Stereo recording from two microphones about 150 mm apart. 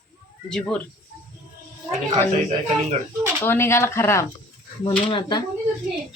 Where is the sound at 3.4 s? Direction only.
15° left (ahead or behind).